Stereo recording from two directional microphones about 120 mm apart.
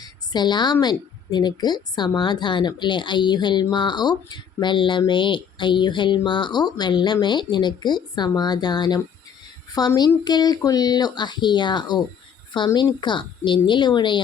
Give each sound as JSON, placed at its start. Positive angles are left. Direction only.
{"t": 0.0, "sound": "speech", "side_deg": 35}